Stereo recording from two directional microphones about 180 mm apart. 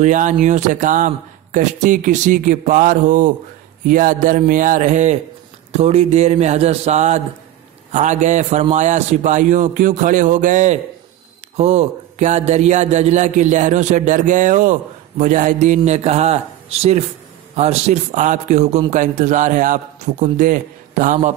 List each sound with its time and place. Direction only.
0.0 s speech: 45° right (ahead or behind)